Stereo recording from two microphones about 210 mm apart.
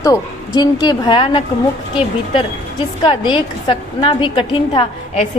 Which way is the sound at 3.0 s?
25° left (ahead or behind).